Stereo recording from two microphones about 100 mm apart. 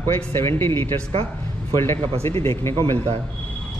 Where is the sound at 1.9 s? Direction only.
80° right.